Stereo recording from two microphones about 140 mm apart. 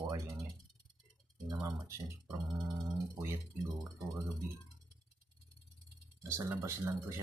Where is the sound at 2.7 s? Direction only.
20° right (ahead or behind).